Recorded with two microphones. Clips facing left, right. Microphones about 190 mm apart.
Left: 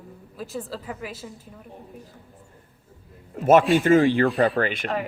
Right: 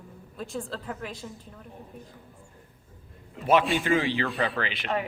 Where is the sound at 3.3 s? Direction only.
45° left (ahead or behind).